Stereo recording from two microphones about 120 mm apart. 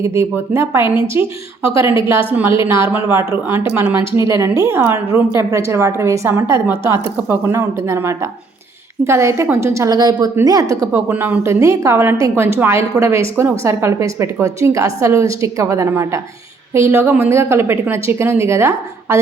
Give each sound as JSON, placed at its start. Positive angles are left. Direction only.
{"t": 0.0, "sound": "a woman's voice", "side_deg": -20}
{"t": 2.5, "sound": "a woman's voice", "side_deg": 45}
{"t": 3.5, "sound": "a woman's voice", "side_deg": -15}
{"t": 11.1, "sound": "a woman's voice", "side_deg": -15}